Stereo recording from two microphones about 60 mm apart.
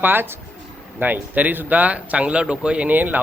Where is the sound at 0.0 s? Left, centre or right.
Right.